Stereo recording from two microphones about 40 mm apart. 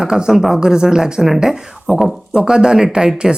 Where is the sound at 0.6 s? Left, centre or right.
Centre.